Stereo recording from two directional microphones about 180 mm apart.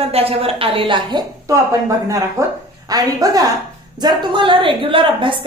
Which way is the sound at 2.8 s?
20° right (ahead or behind).